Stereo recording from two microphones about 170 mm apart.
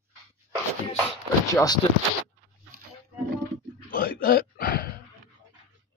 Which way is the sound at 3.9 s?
60° left (ahead or behind).